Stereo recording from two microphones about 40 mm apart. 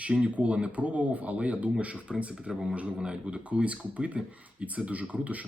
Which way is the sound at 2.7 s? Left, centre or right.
Right.